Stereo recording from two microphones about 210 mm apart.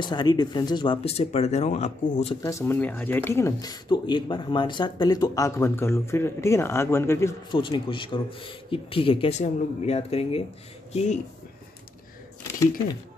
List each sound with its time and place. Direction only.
0.0 s speech: 20° left (ahead or behind)
2.4 s speech: 15° left (ahead or behind)
7.5 s speech: 25° left (ahead or behind)